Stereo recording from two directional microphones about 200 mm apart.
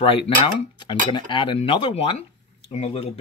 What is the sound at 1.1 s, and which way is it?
Speech, 25° left (ahead or behind).